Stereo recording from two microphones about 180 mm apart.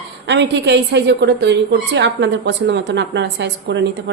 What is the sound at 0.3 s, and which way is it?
A woman's voice, 75° right (ahead or behind).